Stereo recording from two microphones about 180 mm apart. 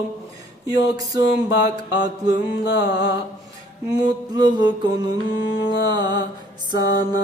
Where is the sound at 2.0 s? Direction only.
20° right (ahead or behind).